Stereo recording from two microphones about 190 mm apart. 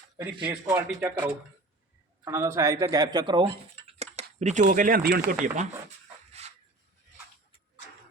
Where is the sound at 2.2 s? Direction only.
15° right (ahead or behind).